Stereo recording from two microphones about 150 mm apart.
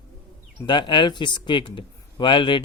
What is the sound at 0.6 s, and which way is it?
Speech, 30° left (ahead or behind).